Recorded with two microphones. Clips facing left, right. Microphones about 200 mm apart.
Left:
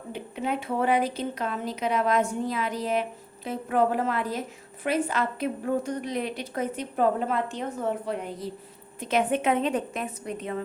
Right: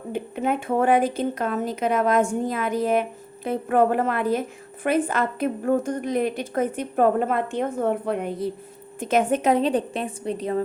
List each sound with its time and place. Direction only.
0.1 s speech: 50° right (ahead or behind)
9.0 s a woman's voice: 45° right (ahead or behind)